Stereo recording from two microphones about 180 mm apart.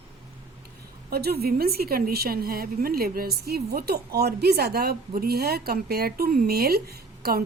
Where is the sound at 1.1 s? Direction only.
60° right (ahead or behind).